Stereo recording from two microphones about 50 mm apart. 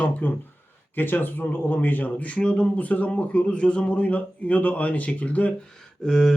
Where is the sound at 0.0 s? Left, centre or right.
Left; by 2.6 s centre.